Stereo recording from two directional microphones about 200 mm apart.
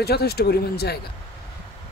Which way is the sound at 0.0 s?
50° left (ahead or behind).